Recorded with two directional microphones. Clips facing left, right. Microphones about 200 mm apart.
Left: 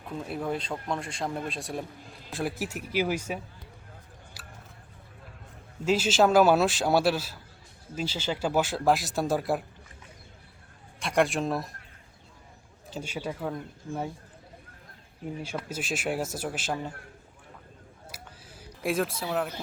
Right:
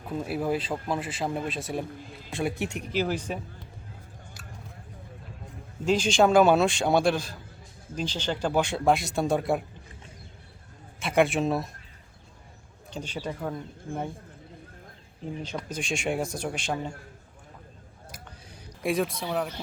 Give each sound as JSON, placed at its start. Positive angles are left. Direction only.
{"t": 0.2, "sound": "speech", "side_deg": -5}
{"t": 4.4, "sound": "a sound", "side_deg": 0}
{"t": 5.8, "sound": "speech", "side_deg": 5}
{"t": 11.0, "sound": "speech", "side_deg": 0}
{"t": 12.9, "sound": "speech", "side_deg": 10}
{"t": 15.4, "sound": "speech", "side_deg": 5}
{"t": 18.1, "sound": "a sound", "side_deg": 10}
{"t": 18.8, "sound": "speech", "side_deg": 0}